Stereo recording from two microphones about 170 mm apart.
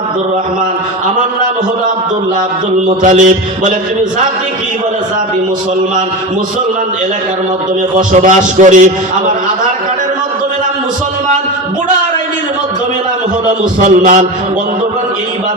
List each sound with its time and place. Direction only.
2.8 s a man's voice: 45° right (ahead or behind)
7.9 s a man's voice: 50° right (ahead or behind)
13.5 s a man's voice: 45° right (ahead or behind)